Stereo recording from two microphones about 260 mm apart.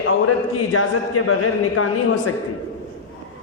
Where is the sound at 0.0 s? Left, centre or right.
Left.